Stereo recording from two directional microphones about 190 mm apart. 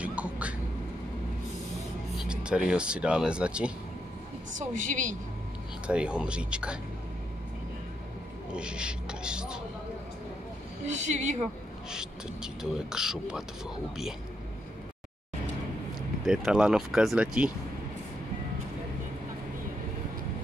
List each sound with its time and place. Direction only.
0.0 s a sound: 5° right (ahead or behind)
2.1 s speech: 5° right (ahead or behind)
4.6 s a woman's voice: 45° right (ahead or behind)
5.9 s speech: 5° right (ahead or behind)
8.5 s speech: 5° right (ahead or behind)
10.9 s a woman's voice: 40° right (ahead or behind)
11.9 s speech: 5° right (ahead or behind)
16.3 s speech: 5° right (ahead or behind)